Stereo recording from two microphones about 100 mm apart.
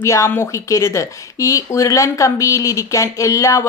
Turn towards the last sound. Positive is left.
turn(degrees=30)  # may be behind; listen again after turning